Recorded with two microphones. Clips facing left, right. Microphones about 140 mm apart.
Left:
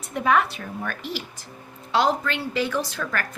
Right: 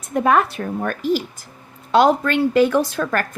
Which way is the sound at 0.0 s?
45° right (ahead or behind).